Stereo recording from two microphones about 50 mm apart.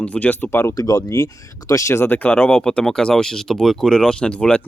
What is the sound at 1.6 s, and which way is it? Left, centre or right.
Speech, left.